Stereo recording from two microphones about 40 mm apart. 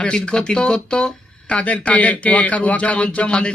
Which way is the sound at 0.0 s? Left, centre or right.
Left.